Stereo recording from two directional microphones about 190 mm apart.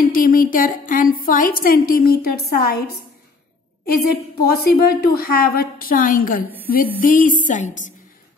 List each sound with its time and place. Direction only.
0.0 s a woman's voice: 50° left (ahead or behind)
4.1 s a woman's voice: 55° left (ahead or behind)